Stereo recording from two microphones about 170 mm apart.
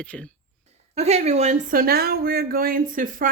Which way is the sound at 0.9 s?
40° right (ahead or behind).